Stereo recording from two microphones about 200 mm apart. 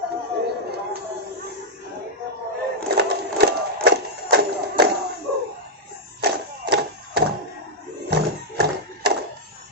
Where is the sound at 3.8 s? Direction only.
55° right (ahead or behind).